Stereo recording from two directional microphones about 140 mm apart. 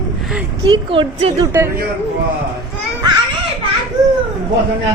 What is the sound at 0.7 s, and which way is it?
Speech, 40° right (ahead or behind).